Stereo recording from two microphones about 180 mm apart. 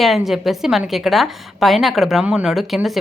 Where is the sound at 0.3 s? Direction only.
Centre (ahead or behind).